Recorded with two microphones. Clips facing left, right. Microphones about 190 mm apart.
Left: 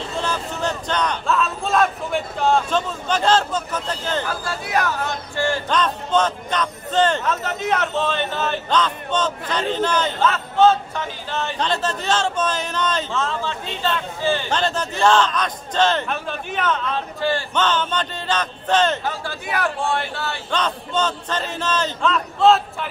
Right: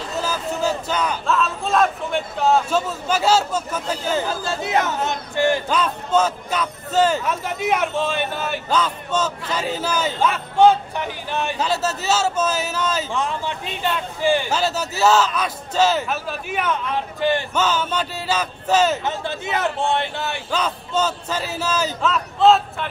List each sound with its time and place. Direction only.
0.1 s speech: 5° right (ahead or behind)
4.3 s a man's voice: 25° right (ahead or behind)
5.7 s a man's voice: 5° right (ahead or behind)
17.6 s a man's voice: 5° right (ahead or behind)
19.0 s a man's voice: 20° right (ahead or behind)
20.5 s a man's voice: 5° right (ahead or behind)